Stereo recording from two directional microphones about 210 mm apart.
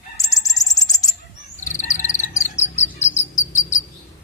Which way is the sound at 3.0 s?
35° left (ahead or behind).